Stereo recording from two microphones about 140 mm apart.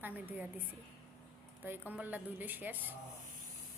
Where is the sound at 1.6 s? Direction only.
15° right (ahead or behind).